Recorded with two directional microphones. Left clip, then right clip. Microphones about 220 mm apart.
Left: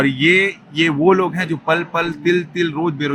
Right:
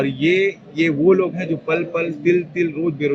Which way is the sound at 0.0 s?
45° left (ahead or behind).